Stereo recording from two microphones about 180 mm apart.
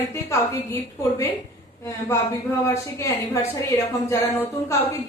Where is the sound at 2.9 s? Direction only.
15° left (ahead or behind).